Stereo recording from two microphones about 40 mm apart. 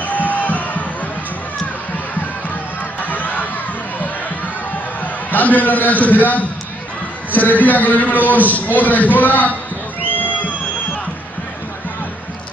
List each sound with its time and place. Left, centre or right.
0.3 s music: left
3.0 s crowd: left
5.3 s a man's voice: left
10.1 s music: left